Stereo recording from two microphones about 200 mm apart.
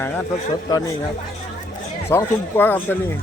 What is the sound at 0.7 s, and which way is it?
Speech, 20° left (ahead or behind).